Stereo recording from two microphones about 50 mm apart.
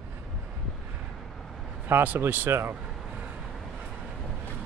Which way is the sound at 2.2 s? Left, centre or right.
Right.